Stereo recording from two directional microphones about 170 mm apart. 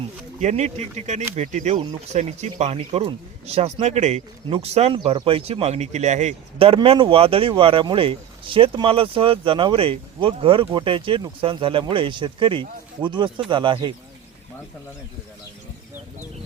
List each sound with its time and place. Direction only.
0.3 s speech: 45° right (ahead or behind)